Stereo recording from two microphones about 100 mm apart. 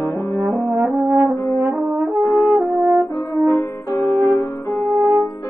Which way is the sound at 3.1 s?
35° left (ahead or behind).